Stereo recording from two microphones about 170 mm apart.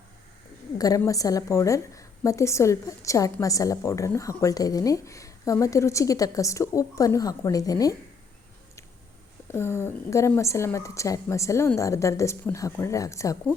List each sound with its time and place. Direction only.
0.8 s speech: 20° left (ahead or behind)
9.5 s a woman's voice: 15° left (ahead or behind)